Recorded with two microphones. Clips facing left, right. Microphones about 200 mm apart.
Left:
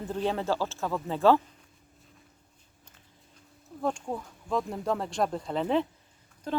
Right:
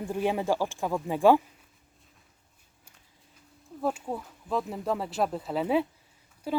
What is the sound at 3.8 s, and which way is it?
A woman's voice, 5° right (ahead or behind).